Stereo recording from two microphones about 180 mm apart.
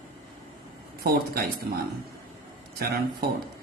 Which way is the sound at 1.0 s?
55° right (ahead or behind).